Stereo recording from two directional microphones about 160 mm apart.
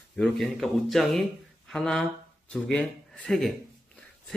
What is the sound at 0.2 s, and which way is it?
Speech, centre (ahead or behind).